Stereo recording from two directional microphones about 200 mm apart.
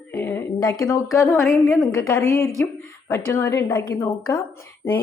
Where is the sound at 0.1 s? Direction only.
10° left (ahead or behind).